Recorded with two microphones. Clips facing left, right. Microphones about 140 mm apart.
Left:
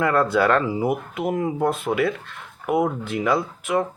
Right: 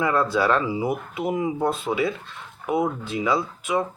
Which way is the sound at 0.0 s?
60° left (ahead or behind).